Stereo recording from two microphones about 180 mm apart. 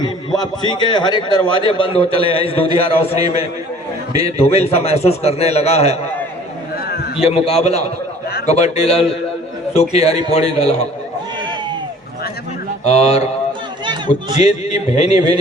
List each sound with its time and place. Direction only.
0.3 s a man's voice: 25° left (ahead or behind)
6.8 s a sound: 60° left (ahead or behind)
7.2 s a man's voice: 35° left (ahead or behind)
12.8 s a man's voice: 35° left (ahead or behind)
14.3 s a man's voice: 40° left (ahead or behind)